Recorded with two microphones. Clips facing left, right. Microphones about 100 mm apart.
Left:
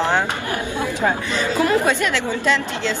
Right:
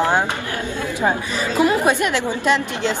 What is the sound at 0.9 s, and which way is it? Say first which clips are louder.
Speech: right 2 dB; 15° right (ahead or behind).